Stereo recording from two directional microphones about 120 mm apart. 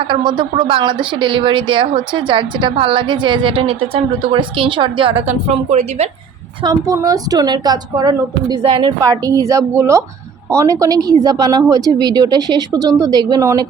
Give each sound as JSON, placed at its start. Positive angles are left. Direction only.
{"t": 0.1, "sound": "speech", "side_deg": -40}
{"t": 5.3, "sound": "a woman's voice", "side_deg": -65}
{"t": 6.6, "sound": "a woman's voice", "side_deg": -35}
{"t": 9.0, "sound": "a woman's voice", "side_deg": -25}